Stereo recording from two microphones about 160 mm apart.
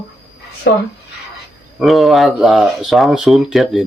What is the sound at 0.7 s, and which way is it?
Speech, 90° left.